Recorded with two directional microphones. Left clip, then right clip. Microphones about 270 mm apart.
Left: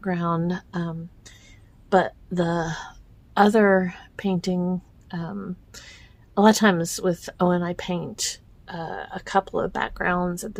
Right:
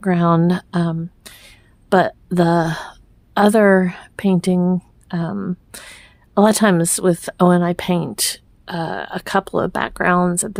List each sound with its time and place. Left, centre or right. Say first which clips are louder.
0.0 s speech: right 9 dB; right